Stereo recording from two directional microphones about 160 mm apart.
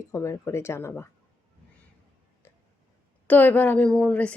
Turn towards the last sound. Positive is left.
turn(degrees=5)  # may be behind; listen again after turning